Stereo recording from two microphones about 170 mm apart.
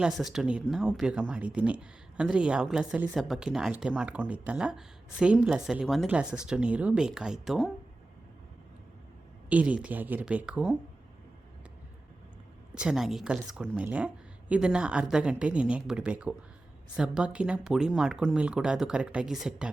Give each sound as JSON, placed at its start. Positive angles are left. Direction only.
{"t": 0.0, "sound": "a woman's voice", "side_deg": 0}
{"t": 9.5, "sound": "a woman's voice", "side_deg": -10}
{"t": 12.7, "sound": "a woman's voice", "side_deg": -5}